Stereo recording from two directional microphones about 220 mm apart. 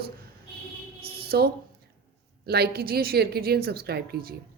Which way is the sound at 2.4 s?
45° right (ahead or behind).